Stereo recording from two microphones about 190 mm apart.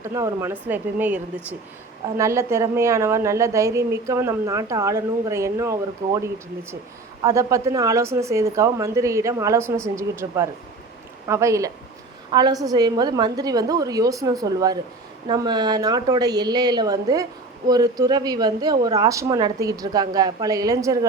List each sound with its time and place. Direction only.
0.0 s a woman's voice: 15° right (ahead or behind)